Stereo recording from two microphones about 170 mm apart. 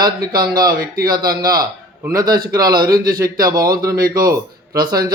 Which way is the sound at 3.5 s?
20° right (ahead or behind).